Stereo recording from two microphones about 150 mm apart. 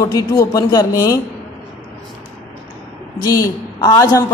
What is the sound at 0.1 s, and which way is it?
A woman's voice, 25° left (ahead or behind).